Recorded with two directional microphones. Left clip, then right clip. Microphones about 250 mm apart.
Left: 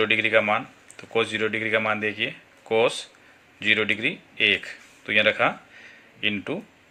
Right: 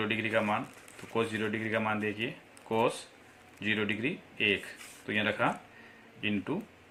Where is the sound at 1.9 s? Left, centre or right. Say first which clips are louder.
Left 8 dB; left.